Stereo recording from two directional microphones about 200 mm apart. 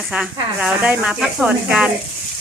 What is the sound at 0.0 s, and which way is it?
Speech, centre (ahead or behind).